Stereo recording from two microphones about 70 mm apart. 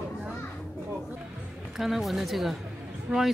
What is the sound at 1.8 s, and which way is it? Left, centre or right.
Speech, centre.